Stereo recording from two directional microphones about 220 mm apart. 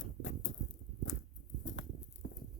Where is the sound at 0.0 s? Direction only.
60° left (ahead or behind).